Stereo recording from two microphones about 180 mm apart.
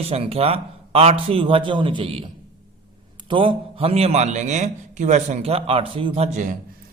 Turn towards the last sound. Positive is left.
turn(degrees=-40)  # may be behind; listen again after turning